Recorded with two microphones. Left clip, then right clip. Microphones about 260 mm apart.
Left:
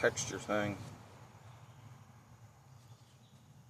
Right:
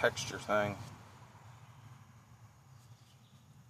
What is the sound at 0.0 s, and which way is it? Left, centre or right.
Speech, centre.